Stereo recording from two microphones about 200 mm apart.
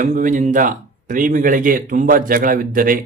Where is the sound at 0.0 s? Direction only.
40° right (ahead or behind).